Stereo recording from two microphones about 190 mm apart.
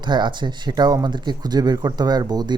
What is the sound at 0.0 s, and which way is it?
Speech, 25° right (ahead or behind).